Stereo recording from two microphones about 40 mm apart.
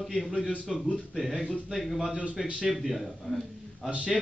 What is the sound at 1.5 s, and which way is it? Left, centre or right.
Speech, centre.